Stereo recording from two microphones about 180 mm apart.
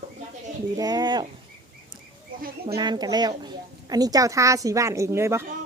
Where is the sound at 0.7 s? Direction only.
20° right (ahead or behind).